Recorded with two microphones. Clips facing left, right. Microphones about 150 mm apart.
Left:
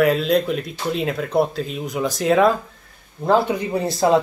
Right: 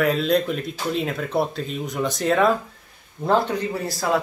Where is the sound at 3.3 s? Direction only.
15° left (ahead or behind).